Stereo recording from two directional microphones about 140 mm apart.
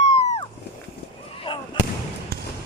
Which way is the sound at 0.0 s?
50° left (ahead or behind).